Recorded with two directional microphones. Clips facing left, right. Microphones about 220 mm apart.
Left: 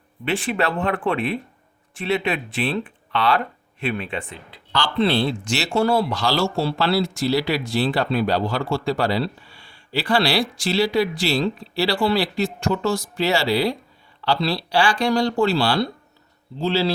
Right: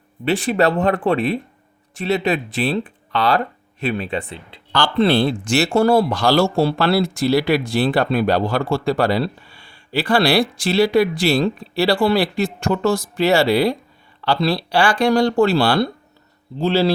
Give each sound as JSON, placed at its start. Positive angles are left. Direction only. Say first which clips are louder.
{"t": 0.3, "sound": "speech", "louder": "right 5 dB", "side_deg": -40}
{"t": 4.7, "sound": "speech", "louder": "right 4 dB", "side_deg": -50}